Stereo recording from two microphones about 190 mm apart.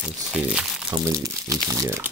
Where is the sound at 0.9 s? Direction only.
15° right (ahead or behind).